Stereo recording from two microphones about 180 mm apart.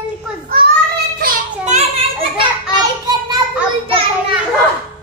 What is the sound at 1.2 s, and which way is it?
Children playing, 50° right (ahead or behind).